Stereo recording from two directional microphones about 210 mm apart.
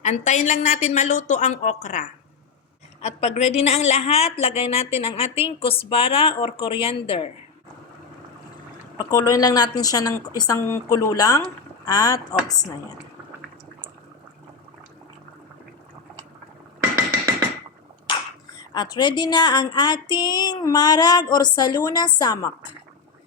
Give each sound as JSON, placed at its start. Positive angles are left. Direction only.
{"t": 0.0, "sound": "a woman's voice", "side_deg": 35}
{"t": 9.0, "sound": "speech", "side_deg": 15}
{"t": 18.7, "sound": "speech", "side_deg": 20}